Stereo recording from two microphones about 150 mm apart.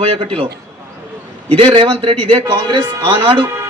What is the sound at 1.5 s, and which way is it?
A man's voice, 35° right (ahead or behind).